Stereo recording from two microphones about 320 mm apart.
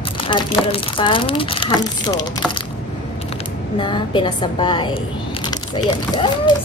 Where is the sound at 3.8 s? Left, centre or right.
Centre.